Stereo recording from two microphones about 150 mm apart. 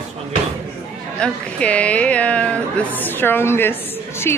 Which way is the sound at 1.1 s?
5° left (ahead or behind).